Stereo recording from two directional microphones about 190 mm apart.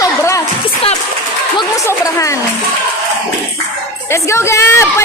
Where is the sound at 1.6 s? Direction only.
15° left (ahead or behind).